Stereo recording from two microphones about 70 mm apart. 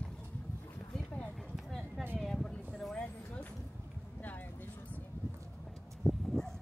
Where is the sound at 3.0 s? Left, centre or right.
Left.